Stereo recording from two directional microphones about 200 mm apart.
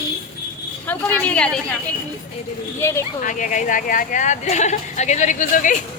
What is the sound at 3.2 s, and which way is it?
A woman's voice, 40° left (ahead or behind).